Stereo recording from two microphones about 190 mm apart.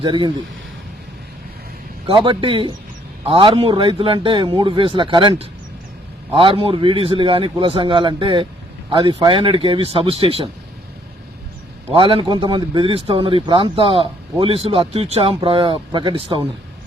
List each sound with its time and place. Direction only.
0.0 s speech: 25° right (ahead or behind)
2.0 s speech: 25° right (ahead or behind)
11.9 s speech: 30° right (ahead or behind)